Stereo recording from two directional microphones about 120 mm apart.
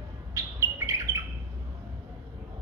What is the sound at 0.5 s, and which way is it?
Bird, 25° right (ahead or behind).